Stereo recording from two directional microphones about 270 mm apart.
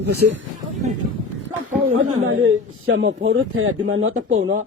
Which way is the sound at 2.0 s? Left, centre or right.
Right.